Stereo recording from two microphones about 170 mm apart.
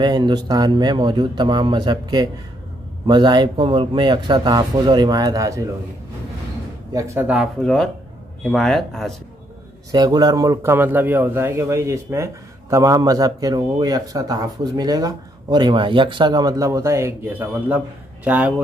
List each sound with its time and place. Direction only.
0.0 s a man's voice: 25° right (ahead or behind)
6.9 s a man's voice: 20° right (ahead or behind)
7.2 s speech: centre (ahead or behind)
9.8 s a man's voice: 20° right (ahead or behind)